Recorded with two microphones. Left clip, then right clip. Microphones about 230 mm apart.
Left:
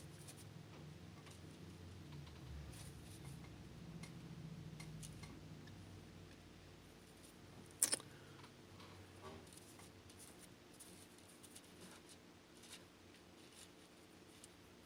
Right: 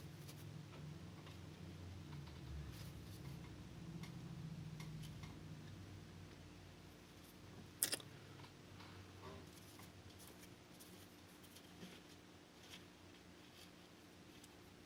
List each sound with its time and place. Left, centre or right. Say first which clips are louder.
7.8 s mechanisms: left 2 dB; left